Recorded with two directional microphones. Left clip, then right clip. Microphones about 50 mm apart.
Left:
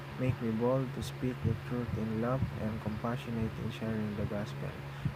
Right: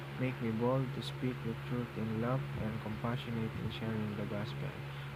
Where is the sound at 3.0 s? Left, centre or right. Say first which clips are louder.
Left 3 dB; right.